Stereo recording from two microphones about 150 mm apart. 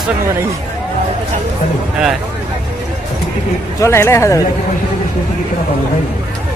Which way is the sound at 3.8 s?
20° left (ahead or behind).